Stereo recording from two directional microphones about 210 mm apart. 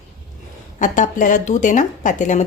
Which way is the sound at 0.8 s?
40° left (ahead or behind).